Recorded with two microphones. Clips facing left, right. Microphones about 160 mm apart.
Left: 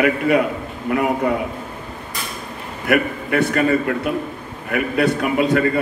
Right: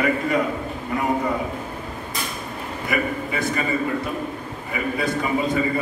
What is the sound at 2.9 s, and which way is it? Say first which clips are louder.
A man's voice: left 7 dB; 65° left (ahead or behind).